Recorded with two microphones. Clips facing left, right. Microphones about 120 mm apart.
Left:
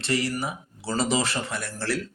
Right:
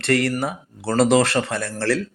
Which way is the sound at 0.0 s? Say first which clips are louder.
Right 6 dB; 60° right (ahead or behind).